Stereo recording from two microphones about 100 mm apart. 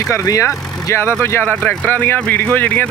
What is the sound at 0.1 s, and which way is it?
Speech, 30° left (ahead or behind).